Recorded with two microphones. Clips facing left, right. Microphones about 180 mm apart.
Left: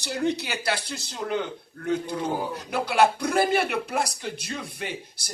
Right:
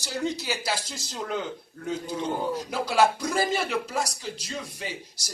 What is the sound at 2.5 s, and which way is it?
Speech, 60° left (ahead or behind).